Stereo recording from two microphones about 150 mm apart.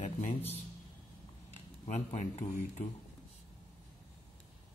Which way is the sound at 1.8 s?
50° left (ahead or behind).